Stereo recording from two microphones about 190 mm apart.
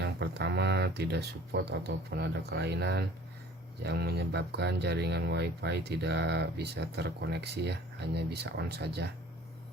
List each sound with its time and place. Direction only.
0.0 s speech: 65° right (ahead or behind)